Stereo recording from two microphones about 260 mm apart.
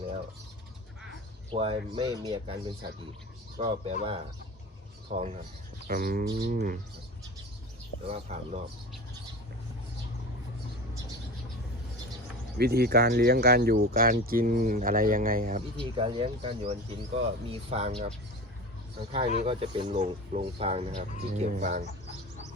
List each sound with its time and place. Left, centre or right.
1.5 s speech: right
3.6 s speech: right
8.0 s speech: right
12.5 s speech: right
15.8 s speech: centre
19.1 s speech: right